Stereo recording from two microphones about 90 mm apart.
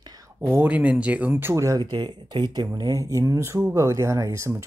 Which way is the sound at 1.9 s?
55° right (ahead or behind).